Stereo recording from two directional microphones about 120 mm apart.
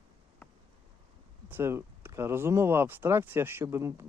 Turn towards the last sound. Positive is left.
turn(degrees=-20)  # may be behind; listen again after turning